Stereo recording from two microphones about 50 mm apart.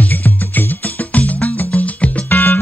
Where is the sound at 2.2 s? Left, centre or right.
Left.